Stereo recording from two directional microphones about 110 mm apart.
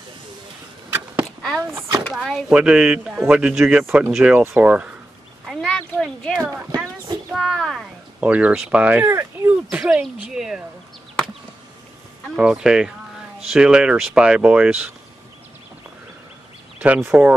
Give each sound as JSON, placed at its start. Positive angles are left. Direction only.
{"t": 0.8, "sound": "a sound", "side_deg": -20}
{"t": 1.6, "sound": "speech", "side_deg": -20}
{"t": 2.1, "sound": "speech", "side_deg": 0}
{"t": 2.5, "sound": "speech", "side_deg": -10}
{"t": 5.5, "sound": "a sound", "side_deg": 5}
{"t": 5.9, "sound": "speech", "side_deg": 5}
{"t": 8.2, "sound": "speech", "side_deg": -10}
{"t": 9.7, "sound": "speech", "side_deg": -10}
{"t": 12.4, "sound": "speech", "side_deg": -5}
{"t": 16.8, "sound": "speech", "side_deg": -15}